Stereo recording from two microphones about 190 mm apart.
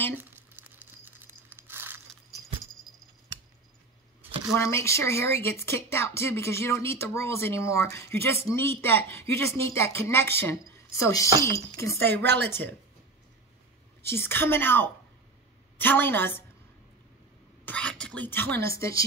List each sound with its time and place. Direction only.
0.1 s tearing: 10° right (ahead or behind)
2.9 s a sound: centre (ahead or behind)
4.6 s speech: 15° left (ahead or behind)
14.0 s speech: 10° left (ahead or behind)
17.6 s speech: 5° left (ahead or behind)